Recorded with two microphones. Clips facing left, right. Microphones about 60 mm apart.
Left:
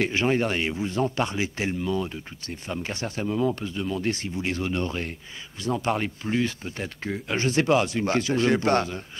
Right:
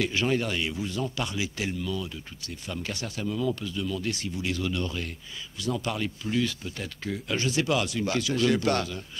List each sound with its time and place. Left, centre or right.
0.0 s speech: left